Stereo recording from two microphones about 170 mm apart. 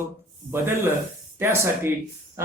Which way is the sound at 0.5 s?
15° right (ahead or behind).